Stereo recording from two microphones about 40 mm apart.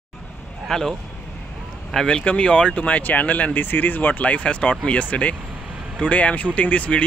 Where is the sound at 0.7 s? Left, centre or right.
Centre.